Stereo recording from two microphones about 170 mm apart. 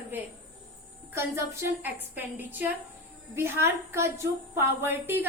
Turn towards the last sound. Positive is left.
turn(degrees=-10)  # may be behind; listen again after turning